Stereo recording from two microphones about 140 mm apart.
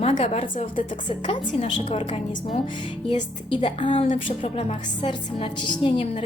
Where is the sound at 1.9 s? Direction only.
45° left (ahead or behind).